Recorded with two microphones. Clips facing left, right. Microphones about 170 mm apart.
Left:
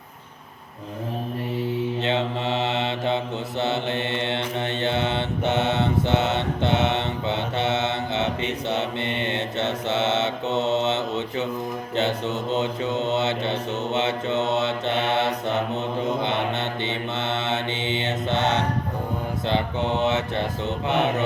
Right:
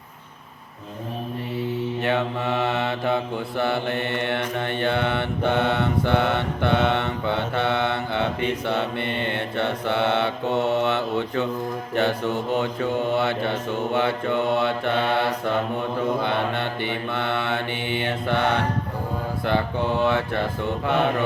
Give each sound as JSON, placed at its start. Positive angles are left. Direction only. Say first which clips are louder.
{"t": 2.0, "sound": "mantra", "louder": "right 1 dB", "side_deg": 20}